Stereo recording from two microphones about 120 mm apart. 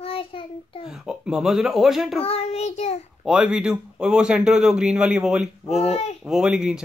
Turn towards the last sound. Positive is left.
turn(degrees=-5)  # may be behind; listen again after turning